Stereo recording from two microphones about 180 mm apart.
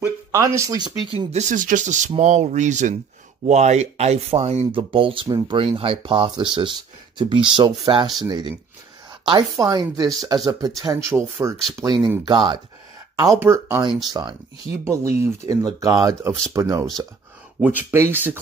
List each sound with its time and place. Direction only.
0.0 s speech: 15° right (ahead or behind)
14.0 s speech: 25° right (ahead or behind)